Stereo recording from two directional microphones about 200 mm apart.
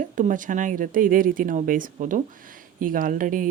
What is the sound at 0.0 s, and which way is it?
Speech, 40° right (ahead or behind).